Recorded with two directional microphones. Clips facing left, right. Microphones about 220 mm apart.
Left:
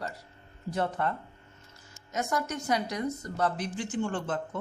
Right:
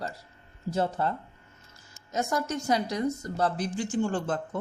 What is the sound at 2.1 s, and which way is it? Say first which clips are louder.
A woman's voice: right 2 dB; 30° right (ahead or behind).